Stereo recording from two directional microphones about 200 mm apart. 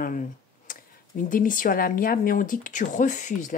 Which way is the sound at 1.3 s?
40° left (ahead or behind).